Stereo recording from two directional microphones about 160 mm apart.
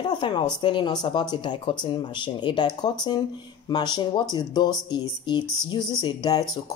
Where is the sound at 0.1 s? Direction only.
30° left (ahead or behind).